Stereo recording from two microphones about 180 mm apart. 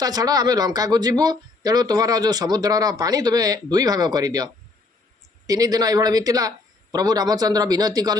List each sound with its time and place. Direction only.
0.0 s speech: 20° right (ahead or behind)
5.5 s speech: 20° right (ahead or behind)